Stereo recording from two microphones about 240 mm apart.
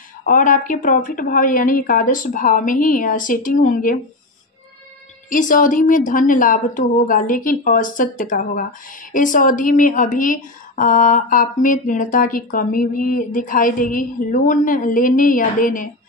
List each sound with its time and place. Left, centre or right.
0.2 s a woman's voice: left
5.3 s a woman's voice: left